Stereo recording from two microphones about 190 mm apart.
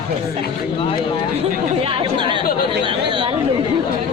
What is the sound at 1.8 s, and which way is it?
Speech, 30° right (ahead or behind).